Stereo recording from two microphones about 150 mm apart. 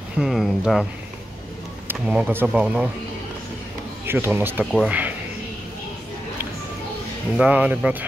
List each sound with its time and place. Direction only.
0.2 s speech: centre (ahead or behind)
1.9 s speech: 10° right (ahead or behind)
4.0 s speech: 15° right (ahead or behind)
7.3 s speech: 5° right (ahead or behind)